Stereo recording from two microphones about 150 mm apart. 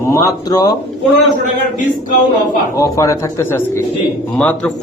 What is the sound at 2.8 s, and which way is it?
Speech, 20° left (ahead or behind).